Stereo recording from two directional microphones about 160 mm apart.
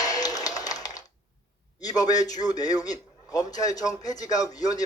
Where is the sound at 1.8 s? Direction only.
25° left (ahead or behind).